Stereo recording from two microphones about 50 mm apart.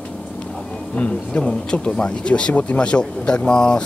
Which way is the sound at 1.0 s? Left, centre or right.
Left.